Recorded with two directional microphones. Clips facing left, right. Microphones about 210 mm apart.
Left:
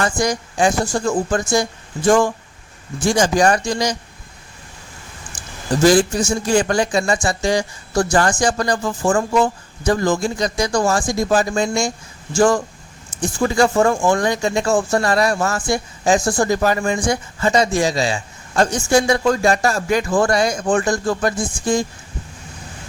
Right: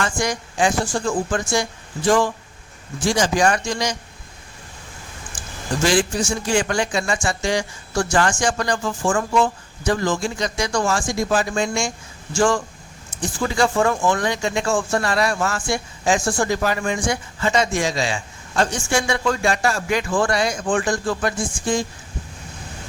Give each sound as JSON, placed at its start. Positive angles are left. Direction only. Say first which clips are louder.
{"t": 0.0, "sound": "speech", "louder": "left 4 dB", "side_deg": 40}
{"t": 5.8, "sound": "speech", "louder": "left 6 dB", "side_deg": 40}
{"t": 13.6, "sound": "speech", "louder": "left 3 dB", "side_deg": 40}